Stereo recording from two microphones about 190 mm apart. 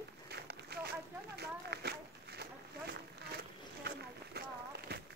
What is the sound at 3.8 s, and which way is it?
Run, 55° right (ahead or behind).